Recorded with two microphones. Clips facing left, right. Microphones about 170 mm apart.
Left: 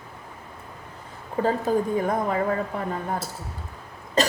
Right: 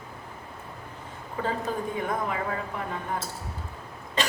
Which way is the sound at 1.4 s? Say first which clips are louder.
Left 7 dB; 40° left (ahead or behind).